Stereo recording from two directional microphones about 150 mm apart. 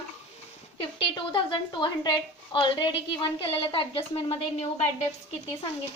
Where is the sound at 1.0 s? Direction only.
35° left (ahead or behind).